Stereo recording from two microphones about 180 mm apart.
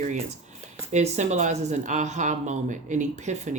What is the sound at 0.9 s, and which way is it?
Speech, 40° right (ahead or behind).